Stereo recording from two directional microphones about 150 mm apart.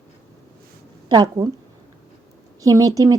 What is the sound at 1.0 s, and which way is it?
Speech, 30° right (ahead or behind).